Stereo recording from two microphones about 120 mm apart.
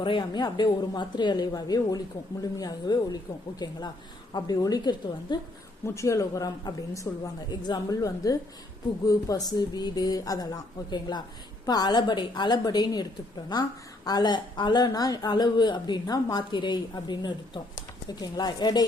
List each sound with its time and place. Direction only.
0.0 s speech: 40° left (ahead or behind)
5.8 s speech: 25° left (ahead or behind)